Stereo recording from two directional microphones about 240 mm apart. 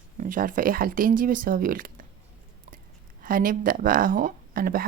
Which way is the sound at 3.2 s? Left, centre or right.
Right.